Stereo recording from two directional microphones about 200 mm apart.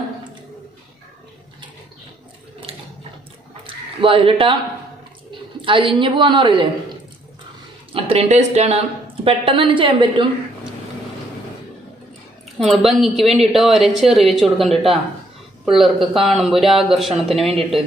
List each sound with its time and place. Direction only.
3.6 s a sound: 25° right (ahead or behind)
5.3 s a woman's voice: 25° right (ahead or behind)
7.9 s a woman's voice: 30° right (ahead or behind)
12.6 s speech: centre (ahead or behind)